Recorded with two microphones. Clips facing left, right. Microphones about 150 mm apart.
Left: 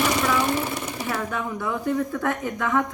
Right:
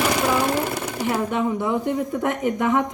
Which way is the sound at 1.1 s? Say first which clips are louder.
Right 6 dB; 20° right (ahead or behind).